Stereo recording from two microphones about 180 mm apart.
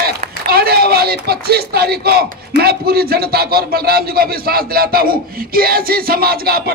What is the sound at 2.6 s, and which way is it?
A man's voice, 60° right (ahead or behind).